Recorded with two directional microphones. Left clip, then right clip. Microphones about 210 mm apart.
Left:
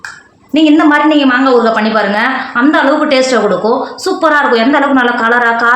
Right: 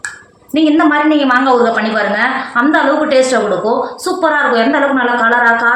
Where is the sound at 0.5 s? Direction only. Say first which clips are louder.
Left 3 dB; 40° left (ahead or behind).